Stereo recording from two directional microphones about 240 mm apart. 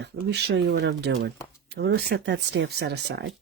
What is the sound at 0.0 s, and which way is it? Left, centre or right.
Speech, right.